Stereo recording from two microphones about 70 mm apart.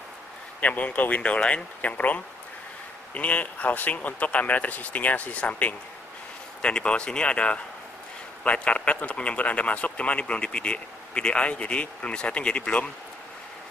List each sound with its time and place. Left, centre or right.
0.6 s speech: left